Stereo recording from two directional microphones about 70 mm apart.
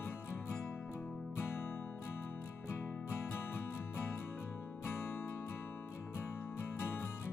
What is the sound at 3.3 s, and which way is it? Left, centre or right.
Music, left.